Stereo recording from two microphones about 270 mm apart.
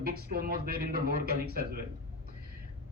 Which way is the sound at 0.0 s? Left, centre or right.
Right.